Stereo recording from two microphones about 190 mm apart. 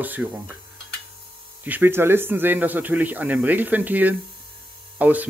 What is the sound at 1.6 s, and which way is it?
Speech, 10° right (ahead or behind).